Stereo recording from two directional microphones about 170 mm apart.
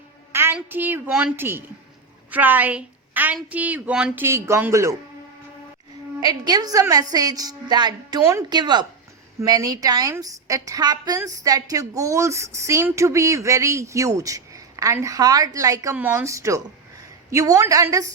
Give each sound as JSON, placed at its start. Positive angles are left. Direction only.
{"t": 0.3, "sound": "a woman's voice", "side_deg": -10}
{"t": 6.2, "sound": "a woman's voice", "side_deg": -25}